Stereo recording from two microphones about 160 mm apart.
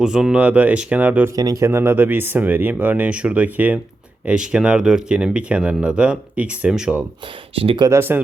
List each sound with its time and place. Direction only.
0.0 s speech: 5° right (ahead or behind)
1.4 s speech: 20° right (ahead or behind); by 7.0 s 5° right (ahead or behind)
7.5 s speech: 35° right (ahead or behind)
7.9 s speech: 15° right (ahead or behind)